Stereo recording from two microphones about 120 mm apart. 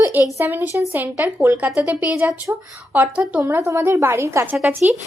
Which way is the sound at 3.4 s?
20° right (ahead or behind).